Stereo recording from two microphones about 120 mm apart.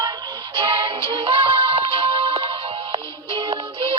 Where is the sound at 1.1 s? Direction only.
50° right (ahead or behind).